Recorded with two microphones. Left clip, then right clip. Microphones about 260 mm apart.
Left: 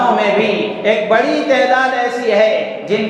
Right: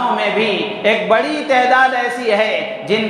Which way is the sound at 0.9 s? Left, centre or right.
Right.